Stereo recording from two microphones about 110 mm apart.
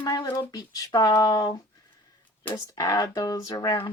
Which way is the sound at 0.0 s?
40° left (ahead or behind).